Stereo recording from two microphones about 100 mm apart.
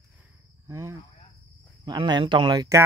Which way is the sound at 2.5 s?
40° right (ahead or behind).